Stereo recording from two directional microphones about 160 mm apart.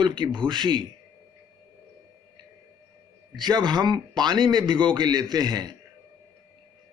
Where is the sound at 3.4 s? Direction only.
25° right (ahead or behind).